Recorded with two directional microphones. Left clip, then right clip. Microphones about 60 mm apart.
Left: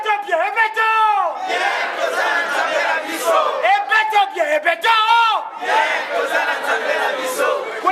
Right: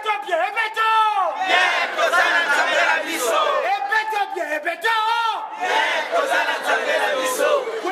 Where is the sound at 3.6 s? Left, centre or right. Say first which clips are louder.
Left 5 dB; centre.